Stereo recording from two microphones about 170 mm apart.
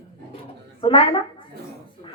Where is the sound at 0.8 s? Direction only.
30° left (ahead or behind).